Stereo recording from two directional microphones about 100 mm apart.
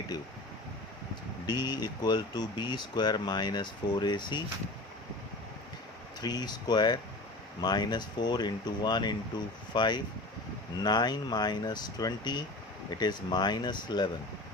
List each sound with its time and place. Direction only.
1.5 s speech: 45° left (ahead or behind)
6.2 s speech: 45° left (ahead or behind)